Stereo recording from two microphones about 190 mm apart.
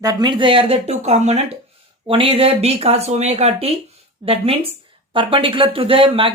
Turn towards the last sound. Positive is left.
turn(degrees=-30)  # may be behind; listen again after turning